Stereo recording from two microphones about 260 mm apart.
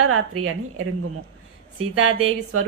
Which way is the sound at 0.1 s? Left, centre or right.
Right.